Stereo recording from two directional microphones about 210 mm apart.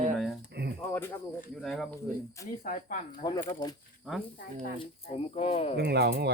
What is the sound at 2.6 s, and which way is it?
Speech, 35° left (ahead or behind).